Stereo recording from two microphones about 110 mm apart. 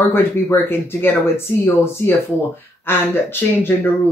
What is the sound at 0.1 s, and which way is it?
Speech, 20° left (ahead or behind).